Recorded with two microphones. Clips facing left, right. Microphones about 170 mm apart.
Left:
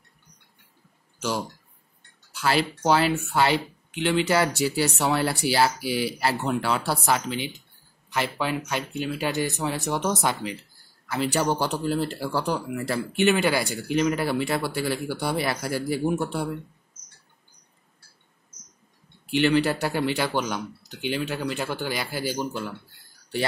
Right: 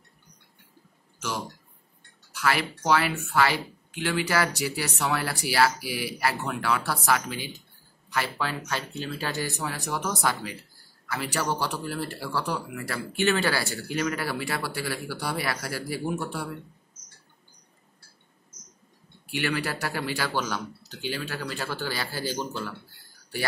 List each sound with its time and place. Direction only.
2.3 s speech: 30° left (ahead or behind)
19.3 s speech: 25° left (ahead or behind)